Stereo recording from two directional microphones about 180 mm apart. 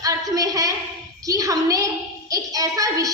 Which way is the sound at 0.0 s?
20° right (ahead or behind).